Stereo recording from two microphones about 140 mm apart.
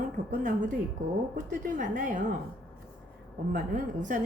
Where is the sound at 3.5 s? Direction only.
70° right (ahead or behind).